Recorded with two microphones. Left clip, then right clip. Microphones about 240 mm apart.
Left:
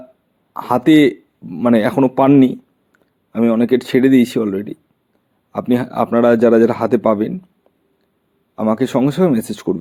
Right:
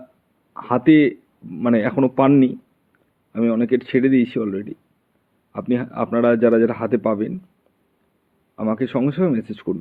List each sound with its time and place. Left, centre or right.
0.5 s speech: left
8.5 s speech: left